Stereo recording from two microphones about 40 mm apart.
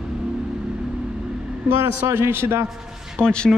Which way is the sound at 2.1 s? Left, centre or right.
Right.